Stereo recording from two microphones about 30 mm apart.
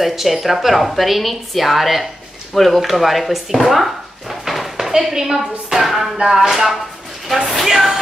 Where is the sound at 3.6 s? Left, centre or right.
Centre.